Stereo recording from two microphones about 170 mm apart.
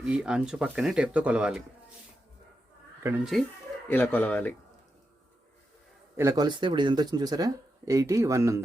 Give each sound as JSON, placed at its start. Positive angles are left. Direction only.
{"t": 0.0, "sound": "speech", "side_deg": -5}
{"t": 3.3, "sound": "speech", "side_deg": 5}
{"t": 6.1, "sound": "speech", "side_deg": -20}